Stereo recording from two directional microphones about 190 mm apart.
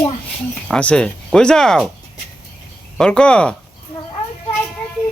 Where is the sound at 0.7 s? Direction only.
5° left (ahead or behind).